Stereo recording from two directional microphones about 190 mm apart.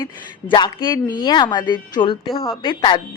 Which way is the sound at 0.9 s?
20° left (ahead or behind).